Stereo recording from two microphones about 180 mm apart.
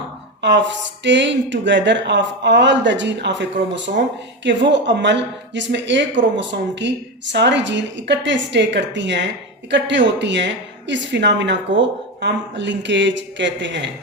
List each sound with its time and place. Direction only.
0.4 s a woman's voice: 80° right